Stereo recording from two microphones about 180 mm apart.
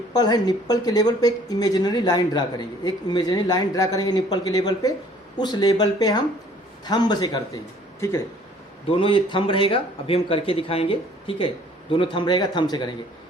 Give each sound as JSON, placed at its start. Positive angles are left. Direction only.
{"t": 0.1, "sound": "speech", "side_deg": 20}
{"t": 8.9, "sound": "speech", "side_deg": 30}